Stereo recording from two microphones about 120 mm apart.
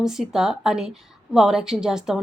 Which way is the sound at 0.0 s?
5° right (ahead or behind).